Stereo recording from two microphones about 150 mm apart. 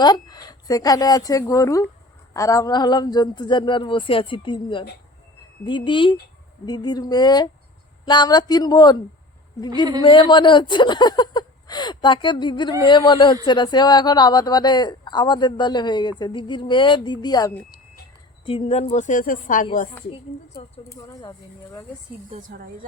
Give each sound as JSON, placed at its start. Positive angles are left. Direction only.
{"t": 0.0, "sound": "a woman's voice", "side_deg": 25}
{"t": 10.0, "sound": "a woman's voice", "side_deg": 30}
{"t": 18.4, "sound": "a woman's voice", "side_deg": 40}
{"t": 20.1, "sound": "speech", "side_deg": 35}
{"t": 20.9, "sound": "a woman's voice", "side_deg": 25}
{"t": 22.4, "sound": "speech", "side_deg": -70}